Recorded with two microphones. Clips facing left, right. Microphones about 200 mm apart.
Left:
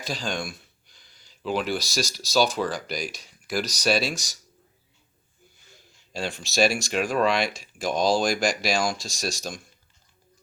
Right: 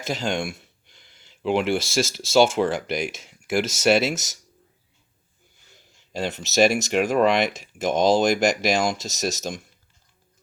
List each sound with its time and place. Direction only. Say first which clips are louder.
0.0 s speech: right 5 dB; 20° right (ahead or behind)
5.7 s speech: right 4 dB; 20° right (ahead or behind)